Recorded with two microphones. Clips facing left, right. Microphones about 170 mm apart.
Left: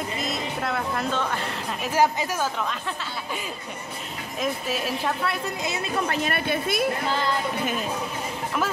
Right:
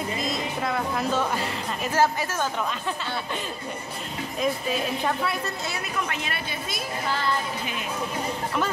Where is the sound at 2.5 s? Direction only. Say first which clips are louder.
Right 1 dB; centre (ahead or behind).